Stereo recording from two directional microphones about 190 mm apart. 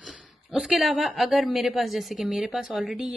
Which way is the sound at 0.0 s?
5° right (ahead or behind).